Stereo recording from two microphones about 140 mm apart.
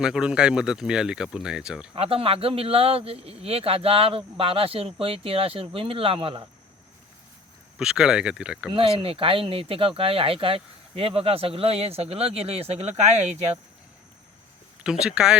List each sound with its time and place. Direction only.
0.0 s speech: 5° right (ahead or behind)
2.0 s speech: 45° right (ahead or behind)
7.8 s speech: 5° right (ahead or behind)
8.7 s speech: 40° right (ahead or behind)
15.0 s speech: 5° right (ahead or behind)